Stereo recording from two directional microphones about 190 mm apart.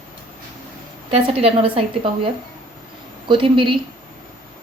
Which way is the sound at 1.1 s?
30° right (ahead or behind).